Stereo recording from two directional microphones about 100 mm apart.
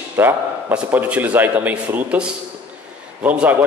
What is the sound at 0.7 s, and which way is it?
A man's voice, 15° right (ahead or behind).